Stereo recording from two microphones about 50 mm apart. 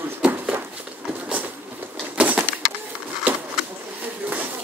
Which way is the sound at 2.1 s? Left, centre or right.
Right.